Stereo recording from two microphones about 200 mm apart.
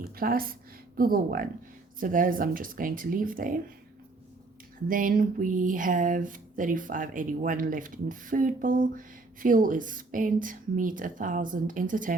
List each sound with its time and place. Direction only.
0.2 s speech: 45° right (ahead or behind)
4.9 s speech: 45° right (ahead or behind)